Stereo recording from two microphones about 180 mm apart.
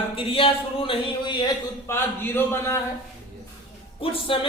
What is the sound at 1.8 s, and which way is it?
Speech, 15° left (ahead or behind).